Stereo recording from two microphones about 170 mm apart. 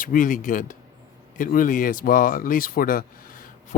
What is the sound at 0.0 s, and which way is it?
Speech, 50° left (ahead or behind).